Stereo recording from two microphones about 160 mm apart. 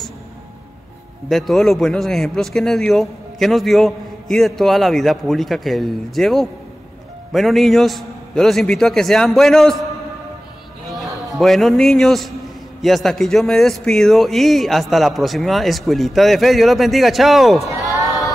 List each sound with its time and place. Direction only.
1.3 s speech: centre (ahead or behind)
11.3 s speech: centre (ahead or behind)
17.6 s speech: 20° right (ahead or behind)